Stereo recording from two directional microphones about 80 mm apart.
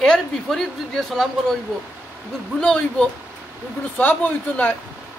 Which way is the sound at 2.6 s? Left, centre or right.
Centre.